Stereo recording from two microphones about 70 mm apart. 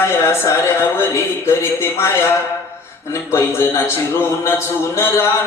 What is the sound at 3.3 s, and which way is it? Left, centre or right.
Speech, left.